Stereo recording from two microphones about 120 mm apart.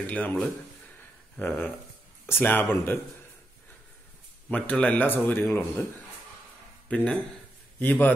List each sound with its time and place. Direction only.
0.0 s speech: 15° left (ahead or behind)
1.4 s speech: 15° left (ahead or behind)
4.5 s speech: 10° left (ahead or behind)
6.9 s speech: 10° left (ahead or behind)